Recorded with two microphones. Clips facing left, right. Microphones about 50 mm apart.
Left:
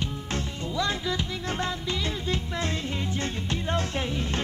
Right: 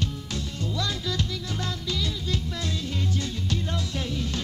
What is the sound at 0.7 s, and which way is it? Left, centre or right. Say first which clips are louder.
Music: left 4 dB; left.